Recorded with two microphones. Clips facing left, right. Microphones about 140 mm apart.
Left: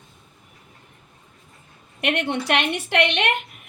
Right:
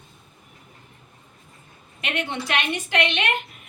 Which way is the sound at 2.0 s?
65° left (ahead or behind).